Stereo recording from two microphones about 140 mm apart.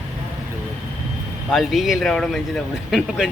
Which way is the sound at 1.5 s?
Centre (ahead or behind).